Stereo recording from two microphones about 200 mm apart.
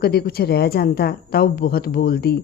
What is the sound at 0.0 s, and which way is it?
A woman's voice, 50° left (ahead or behind).